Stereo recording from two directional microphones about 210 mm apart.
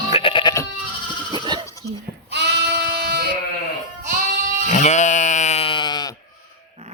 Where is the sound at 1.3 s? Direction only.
20° right (ahead or behind).